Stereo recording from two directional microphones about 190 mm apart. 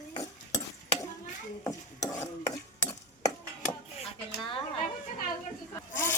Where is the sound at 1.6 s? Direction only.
15° left (ahead or behind).